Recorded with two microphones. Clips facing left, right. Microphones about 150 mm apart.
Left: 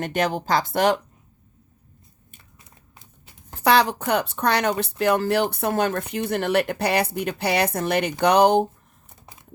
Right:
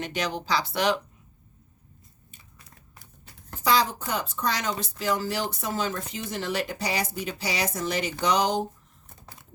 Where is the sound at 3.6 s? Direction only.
65° left (ahead or behind).